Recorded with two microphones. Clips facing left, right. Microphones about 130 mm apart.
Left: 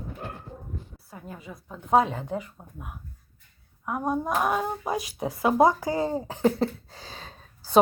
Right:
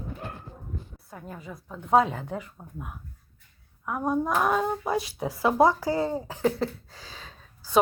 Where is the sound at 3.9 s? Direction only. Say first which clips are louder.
Right 1 dB; 15° left (ahead or behind); by 7.8 s 30° left (ahead or behind).